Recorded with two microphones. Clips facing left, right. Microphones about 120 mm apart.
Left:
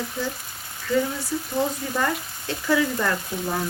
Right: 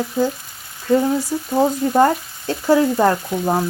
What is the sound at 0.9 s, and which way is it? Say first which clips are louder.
Frying: right 7 dB; 40° right (ahead or behind).